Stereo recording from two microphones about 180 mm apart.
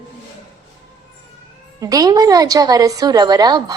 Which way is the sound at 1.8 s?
20° right (ahead or behind).